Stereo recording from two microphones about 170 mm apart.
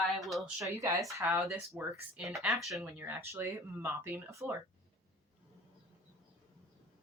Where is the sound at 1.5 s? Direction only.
5° right (ahead or behind).